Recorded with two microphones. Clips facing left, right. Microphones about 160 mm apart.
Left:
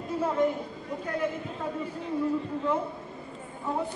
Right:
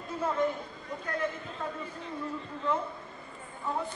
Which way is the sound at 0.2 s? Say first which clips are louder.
Left 3 dB; 15° left (ahead or behind).